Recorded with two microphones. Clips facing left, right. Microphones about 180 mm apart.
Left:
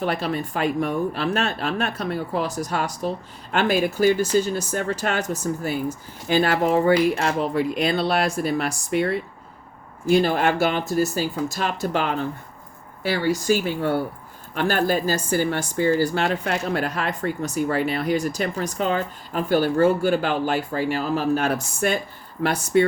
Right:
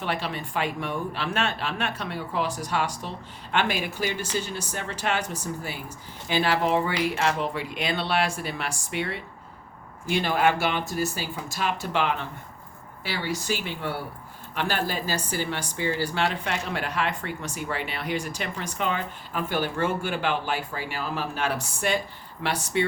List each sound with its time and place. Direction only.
0.0 s speech: 40° left (ahead or behind)